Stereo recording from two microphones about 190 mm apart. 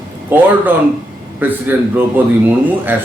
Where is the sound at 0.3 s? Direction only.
10° right (ahead or behind).